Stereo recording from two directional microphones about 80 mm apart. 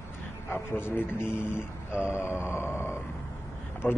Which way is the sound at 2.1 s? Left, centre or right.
Left.